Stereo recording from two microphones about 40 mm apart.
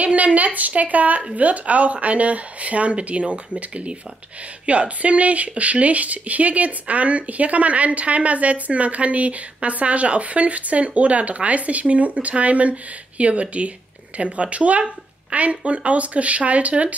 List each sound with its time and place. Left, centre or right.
0.0 s speech: right